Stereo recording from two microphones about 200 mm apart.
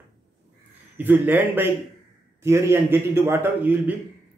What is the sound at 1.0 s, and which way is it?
A man's voice, 10° right (ahead or behind).